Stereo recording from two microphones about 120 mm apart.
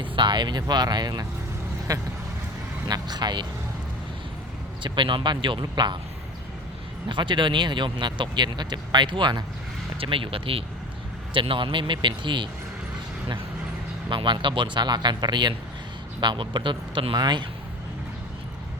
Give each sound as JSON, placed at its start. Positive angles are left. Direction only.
{"t": 0.0, "sound": "speech", "side_deg": -40}
{"t": 4.8, "sound": "speech", "side_deg": -45}
{"t": 7.1, "sound": "speech", "side_deg": -40}
{"t": 14.1, "sound": "speech", "side_deg": -40}